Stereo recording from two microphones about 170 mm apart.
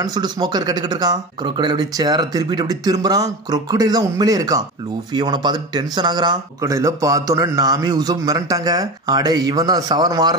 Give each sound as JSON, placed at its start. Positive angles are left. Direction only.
{"t": 0.0, "sound": "speech", "side_deg": -25}